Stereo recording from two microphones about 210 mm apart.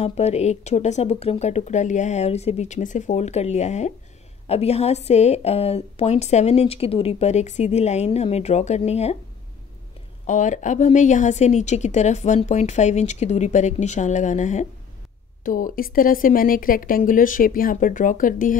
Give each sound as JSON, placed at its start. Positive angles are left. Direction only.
{"t": 0.0, "sound": "a woman's voice", "side_deg": 30}
{"t": 10.2, "sound": "a woman's voice", "side_deg": 35}